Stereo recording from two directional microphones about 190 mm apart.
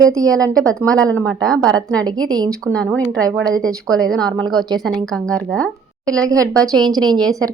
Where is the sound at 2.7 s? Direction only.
5° left (ahead or behind).